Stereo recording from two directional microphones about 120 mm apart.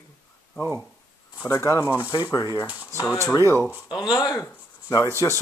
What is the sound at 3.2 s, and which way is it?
Speech, 25° left (ahead or behind).